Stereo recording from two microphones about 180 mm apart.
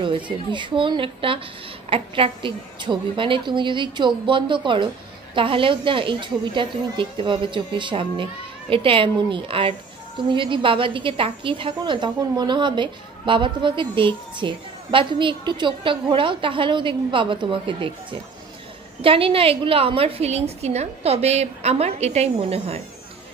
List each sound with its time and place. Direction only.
0.0 s speech: 25° right (ahead or behind)
18.9 s a woman's voice: 30° right (ahead or behind)